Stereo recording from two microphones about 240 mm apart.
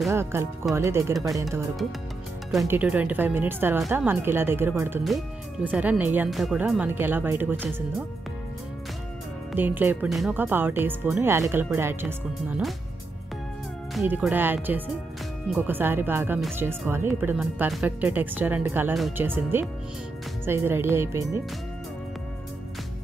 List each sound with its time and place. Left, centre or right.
0.1 s speech: centre
2.5 s speech: centre
9.6 s speech: centre
13.9 s speech: centre